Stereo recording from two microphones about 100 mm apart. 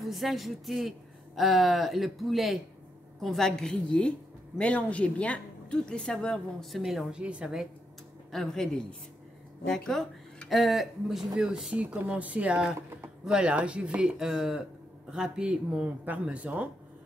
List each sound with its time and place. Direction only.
0.0 s a woman's voice: centre (ahead or behind)
8.3 s speech: 5° left (ahead or behind)
9.7 s speech: 5° left (ahead or behind); by 16.6 s 10° right (ahead or behind)